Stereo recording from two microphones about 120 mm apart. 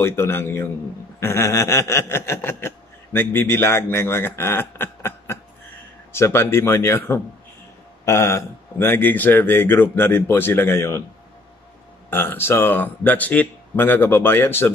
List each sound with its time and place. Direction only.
0.0 s a man's voice: 20° left (ahead or behind)
1.2 s a sound: 20° left (ahead or behind)
6.1 s a man's voice: 20° left (ahead or behind)
12.1 s speech: 20° left (ahead or behind)